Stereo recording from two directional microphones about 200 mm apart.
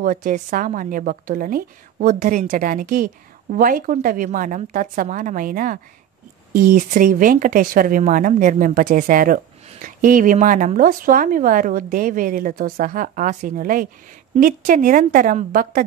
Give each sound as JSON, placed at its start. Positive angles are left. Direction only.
{"t": 0.0, "sound": "speech", "side_deg": -45}